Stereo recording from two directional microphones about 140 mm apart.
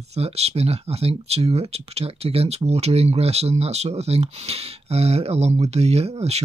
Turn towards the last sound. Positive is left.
turn(degrees=-50)  # may be behind; listen again after turning